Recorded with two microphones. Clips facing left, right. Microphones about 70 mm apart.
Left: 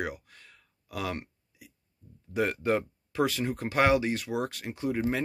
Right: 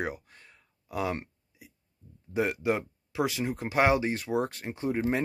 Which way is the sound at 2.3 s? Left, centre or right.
Centre.